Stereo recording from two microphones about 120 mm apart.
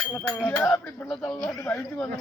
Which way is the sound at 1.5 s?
25° left (ahead or behind).